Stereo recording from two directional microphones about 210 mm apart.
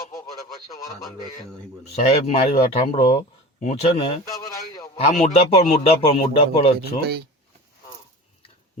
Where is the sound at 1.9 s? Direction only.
30° left (ahead or behind).